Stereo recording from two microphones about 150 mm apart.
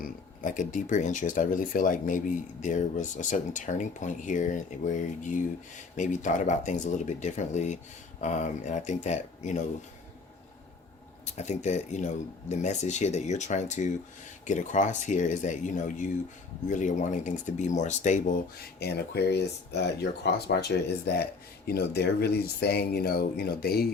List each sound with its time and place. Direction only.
0.0 s speech: 60° left (ahead or behind)
11.3 s speech: 50° left (ahead or behind)
18.8 s speech: 90° left